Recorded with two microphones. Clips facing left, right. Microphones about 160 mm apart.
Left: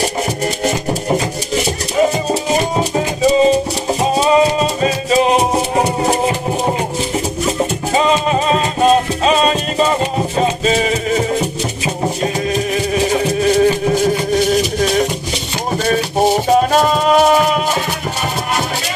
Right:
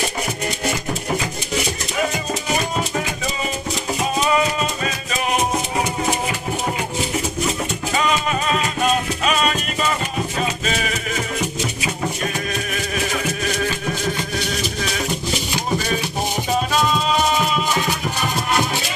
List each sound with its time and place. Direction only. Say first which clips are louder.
4.0 s music: left 7 dB; 35° left (ahead or behind)
7.9 s music: left 6 dB; 30° left (ahead or behind)
14.5 s music: left 10 dB; 40° left (ahead or behind)
16.7 s music: left 7 dB; 50° left (ahead or behind)